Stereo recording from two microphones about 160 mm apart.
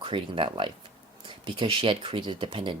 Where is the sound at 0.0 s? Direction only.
35° right (ahead or behind).